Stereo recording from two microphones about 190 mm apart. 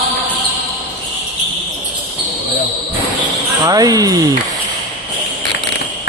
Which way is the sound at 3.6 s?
20° right (ahead or behind).